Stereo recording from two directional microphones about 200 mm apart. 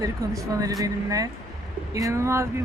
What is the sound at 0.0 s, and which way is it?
Speech, 15° right (ahead or behind).